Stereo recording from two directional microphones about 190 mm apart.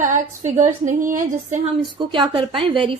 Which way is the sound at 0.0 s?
40° right (ahead or behind).